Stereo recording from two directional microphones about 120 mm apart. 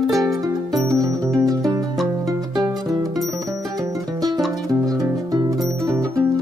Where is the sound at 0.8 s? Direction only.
25° right (ahead or behind).